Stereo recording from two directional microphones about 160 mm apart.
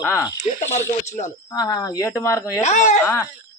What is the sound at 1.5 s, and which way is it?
Speech, 25° left (ahead or behind).